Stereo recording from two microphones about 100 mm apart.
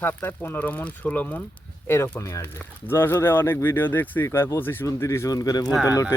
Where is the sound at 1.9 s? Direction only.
30° left (ahead or behind).